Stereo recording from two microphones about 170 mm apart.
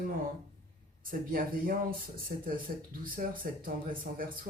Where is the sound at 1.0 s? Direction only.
55° right (ahead or behind).